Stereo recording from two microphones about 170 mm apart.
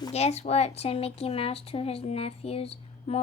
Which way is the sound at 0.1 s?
40° left (ahead or behind).